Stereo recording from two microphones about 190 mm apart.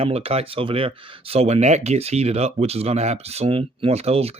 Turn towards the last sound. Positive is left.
turn(degrees=-30)  # may be behind; listen again after turning